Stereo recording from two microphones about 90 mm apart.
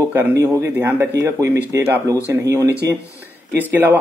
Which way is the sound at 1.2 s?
35° right (ahead or behind).